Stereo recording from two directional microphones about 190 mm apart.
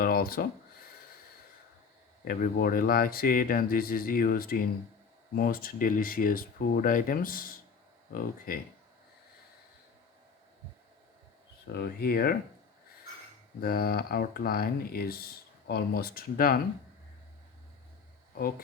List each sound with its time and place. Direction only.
0.0 s a sound: 50° left (ahead or behind)
2.2 s speech: 50° left (ahead or behind)
11.7 s speech: 55° left (ahead or behind)
13.6 s speech: 55° left (ahead or behind)